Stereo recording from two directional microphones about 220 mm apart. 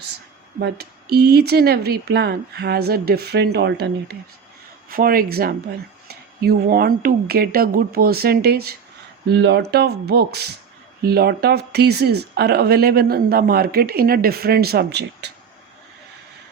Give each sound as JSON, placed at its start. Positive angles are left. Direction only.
{"t": 0.6, "sound": "speech", "side_deg": -45}